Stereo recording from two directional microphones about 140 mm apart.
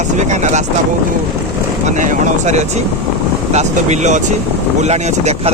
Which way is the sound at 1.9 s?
65° right (ahead or behind).